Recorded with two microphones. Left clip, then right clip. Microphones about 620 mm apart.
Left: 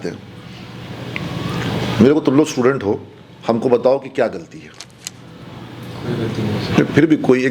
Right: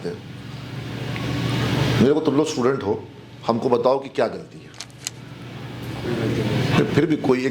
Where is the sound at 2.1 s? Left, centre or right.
Centre.